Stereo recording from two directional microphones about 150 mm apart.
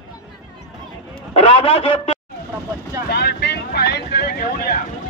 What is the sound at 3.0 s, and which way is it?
Vehicle, 90° left.